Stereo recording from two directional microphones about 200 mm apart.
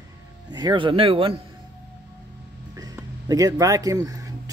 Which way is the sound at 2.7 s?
15° right (ahead or behind).